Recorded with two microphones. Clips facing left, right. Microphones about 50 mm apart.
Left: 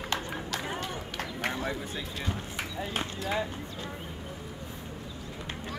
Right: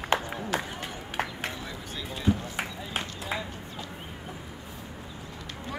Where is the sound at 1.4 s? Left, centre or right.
Left.